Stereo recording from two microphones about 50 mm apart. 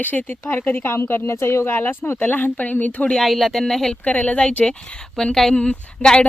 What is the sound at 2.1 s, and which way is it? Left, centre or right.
Speech, left.